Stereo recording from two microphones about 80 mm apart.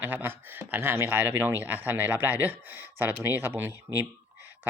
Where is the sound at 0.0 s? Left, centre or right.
Right.